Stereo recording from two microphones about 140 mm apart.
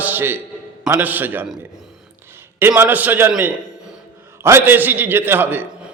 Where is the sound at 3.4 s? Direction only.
15° right (ahead or behind).